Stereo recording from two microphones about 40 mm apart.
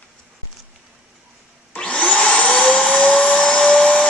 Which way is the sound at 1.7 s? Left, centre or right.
Left.